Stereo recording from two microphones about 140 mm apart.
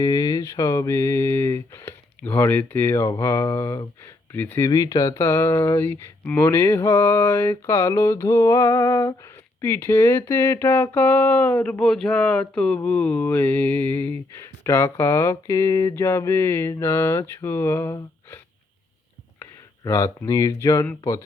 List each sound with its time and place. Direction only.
0.0 s speech: 25° left (ahead or behind)
9.6 s a sound: 15° left (ahead or behind)
19.8 s speech: 20° left (ahead or behind)